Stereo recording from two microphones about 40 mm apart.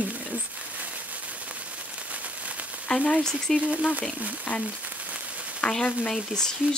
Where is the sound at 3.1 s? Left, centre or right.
Centre.